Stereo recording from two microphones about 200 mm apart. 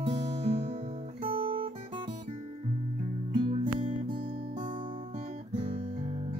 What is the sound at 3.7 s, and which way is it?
Music, 25° right (ahead or behind).